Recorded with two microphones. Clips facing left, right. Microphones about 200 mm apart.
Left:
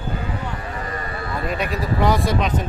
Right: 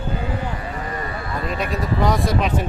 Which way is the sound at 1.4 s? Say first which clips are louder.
Even; centre (ahead or behind).